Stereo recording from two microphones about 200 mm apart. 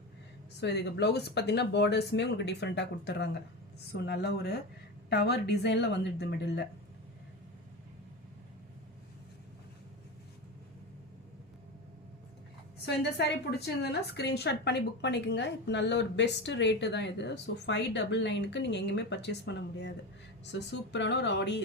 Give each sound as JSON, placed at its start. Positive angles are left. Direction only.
{"t": 0.6, "sound": "a woman's voice", "side_deg": 55}
{"t": 12.8, "sound": "a woman's voice", "side_deg": 55}